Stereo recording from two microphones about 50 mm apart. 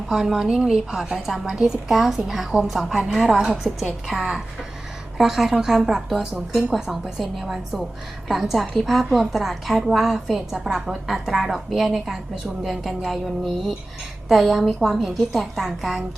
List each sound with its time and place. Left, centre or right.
0.1 s a woman's voice: centre
4.2 s a woman's voice: centre